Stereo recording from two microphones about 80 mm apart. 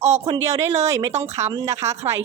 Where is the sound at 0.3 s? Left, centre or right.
Right.